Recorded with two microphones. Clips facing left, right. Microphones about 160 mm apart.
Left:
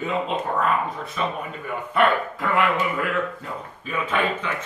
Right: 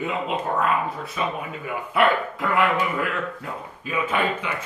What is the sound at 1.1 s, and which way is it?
Speech, 5° right (ahead or behind).